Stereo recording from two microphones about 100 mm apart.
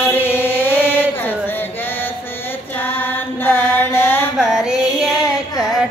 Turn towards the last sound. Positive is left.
turn(degrees=-5)  # may be behind; listen again after turning